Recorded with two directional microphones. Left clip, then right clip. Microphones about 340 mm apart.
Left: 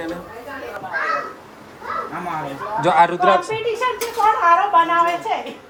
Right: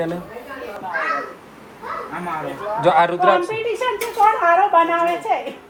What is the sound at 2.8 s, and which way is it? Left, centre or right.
Speech, centre.